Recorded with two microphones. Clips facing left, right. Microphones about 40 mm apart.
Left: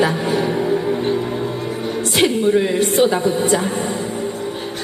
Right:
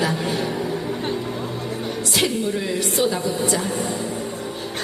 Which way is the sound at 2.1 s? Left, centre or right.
Left.